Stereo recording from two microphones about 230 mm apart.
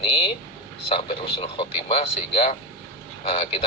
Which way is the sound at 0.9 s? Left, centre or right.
Left.